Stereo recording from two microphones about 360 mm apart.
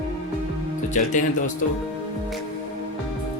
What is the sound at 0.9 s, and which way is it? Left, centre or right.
Speech, left.